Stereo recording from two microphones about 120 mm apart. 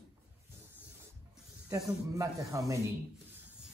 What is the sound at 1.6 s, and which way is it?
Speech, 25° right (ahead or behind).